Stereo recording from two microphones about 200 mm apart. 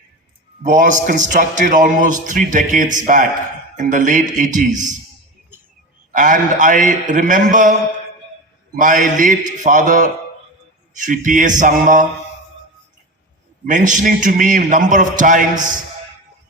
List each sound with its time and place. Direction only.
0.6 s a man's voice: 40° right (ahead or behind)
6.1 s a man's voice: 40° right (ahead or behind)
13.7 s a man's voice: 40° right (ahead or behind)